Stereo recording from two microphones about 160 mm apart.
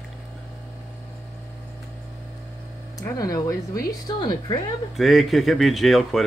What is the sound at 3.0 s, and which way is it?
Speech, 20° left (ahead or behind).